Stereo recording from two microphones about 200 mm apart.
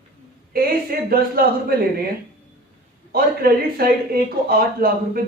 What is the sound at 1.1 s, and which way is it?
Speech, 50° right (ahead or behind).